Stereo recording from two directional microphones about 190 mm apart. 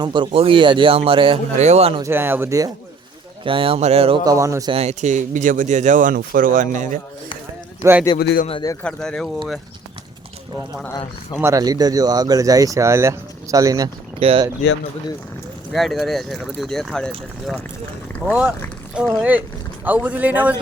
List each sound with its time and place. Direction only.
0.0 s speech: 25° right (ahead or behind)
2.0 s speech: 15° right (ahead or behind)
3.4 s speech: 30° right (ahead or behind)
4.2 s speech: 20° right (ahead or behind)
4.7 s speech: 35° right (ahead or behind)
7.8 s a man's voice: 10° right (ahead or behind)
8.2 s speech: 55° left (ahead or behind)
8.4 s a man's voice: 30° left (ahead or behind)
8.8 s speech: 5° left (ahead or behind)
11.3 s speech: 15° right (ahead or behind)
15.7 s speech: centre (ahead or behind)
19.8 s speech: 10° right (ahead or behind)